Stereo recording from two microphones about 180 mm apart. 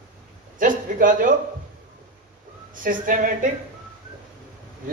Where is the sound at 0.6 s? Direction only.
50° right (ahead or behind).